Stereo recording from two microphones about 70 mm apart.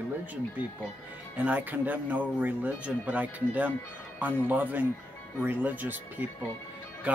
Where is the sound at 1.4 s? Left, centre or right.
Right.